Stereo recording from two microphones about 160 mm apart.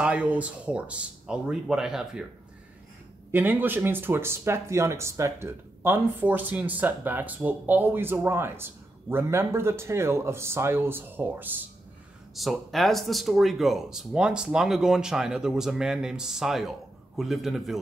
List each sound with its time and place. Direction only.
0.0 s speech: 10° right (ahead or behind)
3.3 s speech: 10° right (ahead or behind)
12.4 s speech: centre (ahead or behind)